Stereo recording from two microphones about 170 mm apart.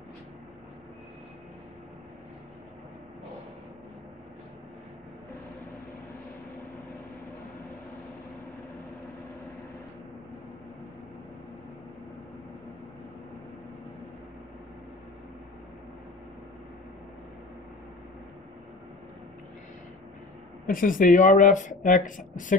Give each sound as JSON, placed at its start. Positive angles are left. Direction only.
{"t": 20.6, "sound": "speech", "side_deg": 55}